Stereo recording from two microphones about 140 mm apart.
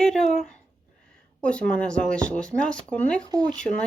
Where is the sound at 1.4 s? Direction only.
10° left (ahead or behind).